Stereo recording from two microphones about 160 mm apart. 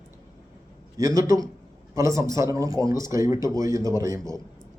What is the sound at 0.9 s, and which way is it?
A man's voice, 20° right (ahead or behind).